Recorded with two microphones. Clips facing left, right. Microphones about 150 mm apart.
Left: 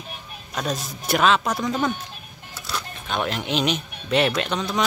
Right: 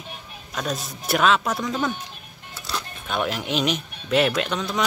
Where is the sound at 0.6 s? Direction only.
Centre (ahead or behind).